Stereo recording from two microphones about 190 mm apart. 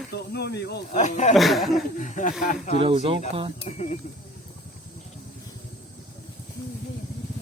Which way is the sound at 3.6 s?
40° left (ahead or behind).